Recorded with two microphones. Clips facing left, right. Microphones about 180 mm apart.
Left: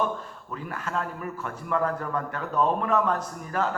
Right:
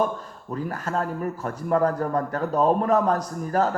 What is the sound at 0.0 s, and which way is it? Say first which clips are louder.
A man's voice: right 3 dB; 40° right (ahead or behind).